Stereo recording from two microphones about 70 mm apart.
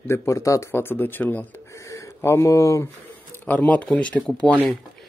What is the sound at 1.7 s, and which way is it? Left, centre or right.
Speech, left.